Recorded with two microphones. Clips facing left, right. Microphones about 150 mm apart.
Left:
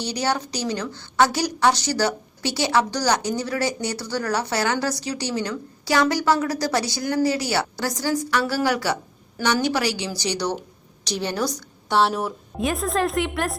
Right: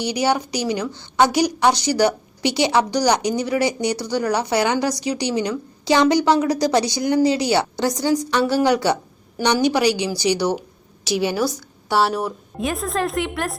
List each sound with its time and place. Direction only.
0.0 s a woman's voice: 15° right (ahead or behind)